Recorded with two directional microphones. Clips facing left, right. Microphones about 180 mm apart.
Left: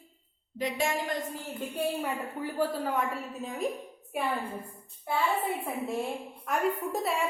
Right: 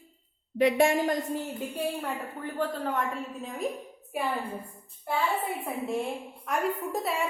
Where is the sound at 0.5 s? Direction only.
60° right (ahead or behind).